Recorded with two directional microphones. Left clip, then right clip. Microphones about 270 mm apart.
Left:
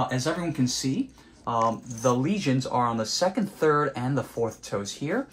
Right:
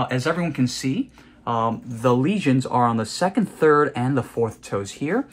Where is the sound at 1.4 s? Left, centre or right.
Right.